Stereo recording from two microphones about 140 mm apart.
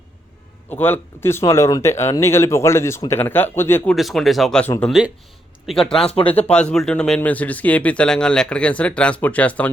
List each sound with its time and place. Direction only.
0.7 s speech: 15° left (ahead or behind)
3.9 s speech: centre (ahead or behind)